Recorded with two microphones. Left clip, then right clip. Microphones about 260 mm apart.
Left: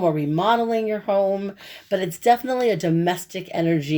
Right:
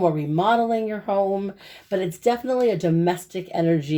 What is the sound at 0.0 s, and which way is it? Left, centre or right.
Speech, left.